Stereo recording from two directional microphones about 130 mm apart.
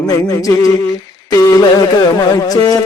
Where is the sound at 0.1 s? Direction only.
25° left (ahead or behind).